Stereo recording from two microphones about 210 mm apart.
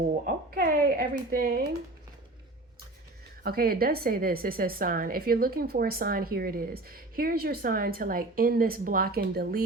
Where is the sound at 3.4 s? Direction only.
45° right (ahead or behind).